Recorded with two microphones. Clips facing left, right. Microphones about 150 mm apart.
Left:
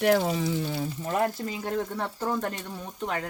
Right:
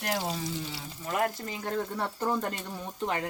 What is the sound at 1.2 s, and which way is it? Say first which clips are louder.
Speech: left 3 dB; 15° left (ahead or behind).